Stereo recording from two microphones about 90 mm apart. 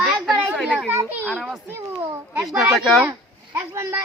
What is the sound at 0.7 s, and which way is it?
Speech, 15° right (ahead or behind).